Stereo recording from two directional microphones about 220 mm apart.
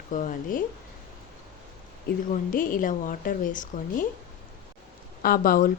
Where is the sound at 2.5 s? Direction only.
40° left (ahead or behind).